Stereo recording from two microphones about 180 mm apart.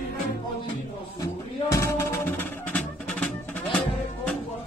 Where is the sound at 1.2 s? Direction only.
15° left (ahead or behind).